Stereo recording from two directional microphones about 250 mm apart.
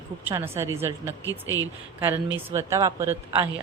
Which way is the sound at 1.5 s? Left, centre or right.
Centre.